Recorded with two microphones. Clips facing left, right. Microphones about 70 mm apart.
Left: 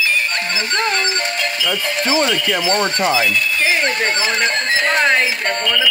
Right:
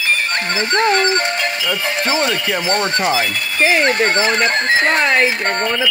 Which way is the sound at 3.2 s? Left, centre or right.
Right.